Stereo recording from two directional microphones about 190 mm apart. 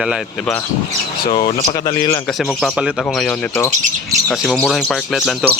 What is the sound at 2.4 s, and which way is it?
Speech, centre (ahead or behind).